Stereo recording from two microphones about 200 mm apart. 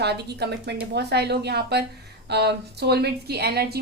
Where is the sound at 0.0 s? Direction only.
55° right (ahead or behind).